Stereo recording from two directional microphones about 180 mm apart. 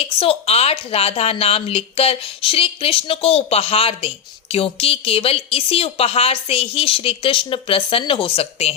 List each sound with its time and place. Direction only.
0.0 s a woman's voice: 30° left (ahead or behind)